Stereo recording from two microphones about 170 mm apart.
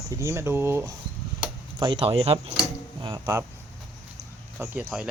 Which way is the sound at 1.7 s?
25° right (ahead or behind).